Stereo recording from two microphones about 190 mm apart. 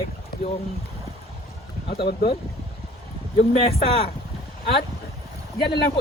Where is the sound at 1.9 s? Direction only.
30° left (ahead or behind).